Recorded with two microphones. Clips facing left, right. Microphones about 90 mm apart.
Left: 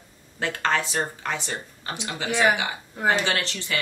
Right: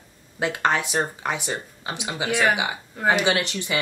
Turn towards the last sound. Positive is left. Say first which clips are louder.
# right 4 dB
turn(degrees=-15)  # may be behind; listen again after turning